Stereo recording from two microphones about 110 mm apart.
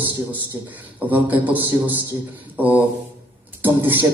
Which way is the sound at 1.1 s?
15° right (ahead or behind).